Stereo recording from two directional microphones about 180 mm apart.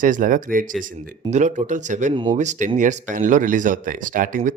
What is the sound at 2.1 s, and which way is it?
Speech, 25° right (ahead or behind).